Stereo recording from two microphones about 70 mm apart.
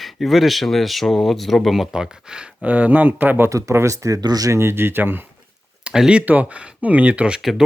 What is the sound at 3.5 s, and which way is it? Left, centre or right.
Speech, right.